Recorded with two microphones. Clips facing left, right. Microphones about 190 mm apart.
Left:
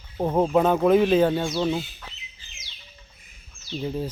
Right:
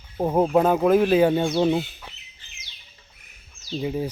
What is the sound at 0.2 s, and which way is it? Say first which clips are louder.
Speech: right 1 dB; 10° right (ahead or behind).